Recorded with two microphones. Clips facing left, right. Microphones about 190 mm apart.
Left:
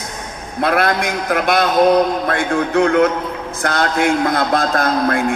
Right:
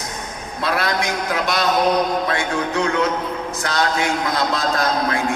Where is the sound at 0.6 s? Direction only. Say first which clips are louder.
Left 5 dB; 55° left (ahead or behind).